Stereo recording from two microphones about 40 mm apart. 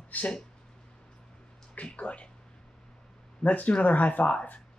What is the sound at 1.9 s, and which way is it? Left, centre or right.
Speech, left.